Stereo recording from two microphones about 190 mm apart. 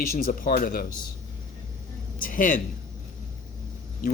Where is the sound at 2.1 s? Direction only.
45° left (ahead or behind).